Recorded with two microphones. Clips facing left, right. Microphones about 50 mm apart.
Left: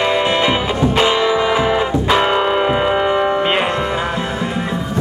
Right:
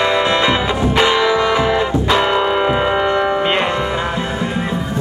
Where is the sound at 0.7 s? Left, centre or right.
Centre.